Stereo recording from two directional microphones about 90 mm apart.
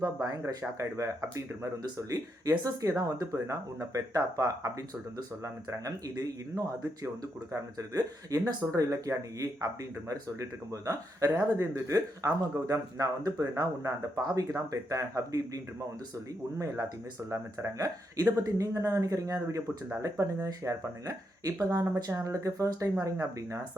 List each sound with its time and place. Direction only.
0.0 s speech: 40° right (ahead or behind)
22.1 s speech: 35° right (ahead or behind)